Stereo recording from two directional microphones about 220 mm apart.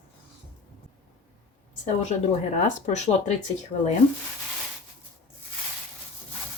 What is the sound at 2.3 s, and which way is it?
Speech, 30° left (ahead or behind).